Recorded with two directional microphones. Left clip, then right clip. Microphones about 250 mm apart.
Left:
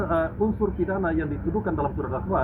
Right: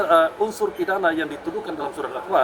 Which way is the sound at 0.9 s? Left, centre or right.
Right.